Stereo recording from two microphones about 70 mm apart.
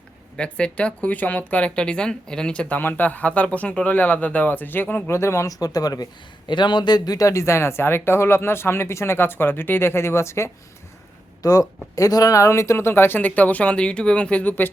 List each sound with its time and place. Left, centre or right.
0.3 s speech: centre
5.0 s speech: left
5.5 s speech: left
6.5 s speech: left
11.4 s speech: left